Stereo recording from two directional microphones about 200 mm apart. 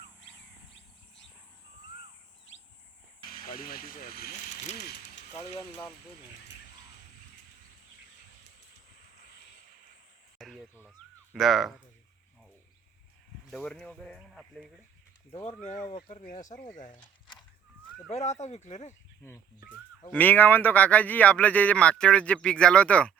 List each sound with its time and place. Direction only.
2.5 s bird: 70° left (ahead or behind)
3.2 s speech: 45° left (ahead or behind)
4.3 s speech: 35° left (ahead or behind)
5.5 s speech: 15° left (ahead or behind)
9.2 s a sound: 55° left (ahead or behind)
10.3 s a sound: centre (ahead or behind)
10.8 s speech: 5° right (ahead or behind)
13.5 s speech: centre (ahead or behind)
15.3 s speech: 30° left (ahead or behind)
18.1 s speech: 35° left (ahead or behind)
20.1 s speech: 10° left (ahead or behind)